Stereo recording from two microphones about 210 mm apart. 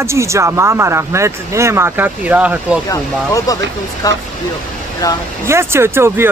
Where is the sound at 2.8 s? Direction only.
15° left (ahead or behind).